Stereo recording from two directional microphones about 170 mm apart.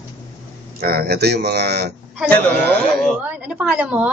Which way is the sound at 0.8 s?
65° right (ahead or behind).